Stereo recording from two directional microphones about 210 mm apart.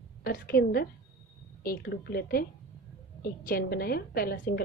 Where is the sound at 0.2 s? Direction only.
45° left (ahead or behind).